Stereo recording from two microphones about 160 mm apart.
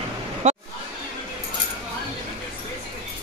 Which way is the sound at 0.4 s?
50° right (ahead or behind).